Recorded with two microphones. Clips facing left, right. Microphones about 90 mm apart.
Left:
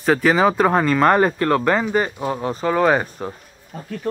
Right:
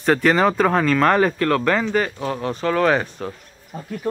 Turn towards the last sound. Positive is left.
turn(degrees=-20)  # may be behind; listen again after turning